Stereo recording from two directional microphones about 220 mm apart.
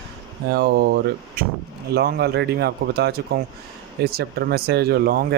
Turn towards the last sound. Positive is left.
turn(degrees=-45)  # may be behind; listen again after turning